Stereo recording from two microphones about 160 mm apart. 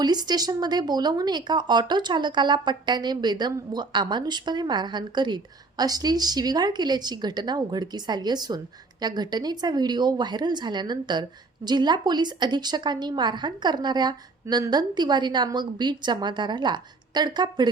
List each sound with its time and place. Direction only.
0.0 s speech: 25° right (ahead or behind)